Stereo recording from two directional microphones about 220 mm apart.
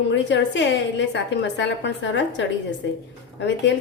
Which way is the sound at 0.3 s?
55° left (ahead or behind).